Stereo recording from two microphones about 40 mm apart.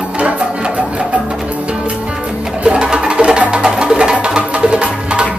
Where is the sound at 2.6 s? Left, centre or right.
Right.